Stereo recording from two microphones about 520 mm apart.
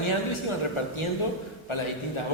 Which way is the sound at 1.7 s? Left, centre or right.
Left.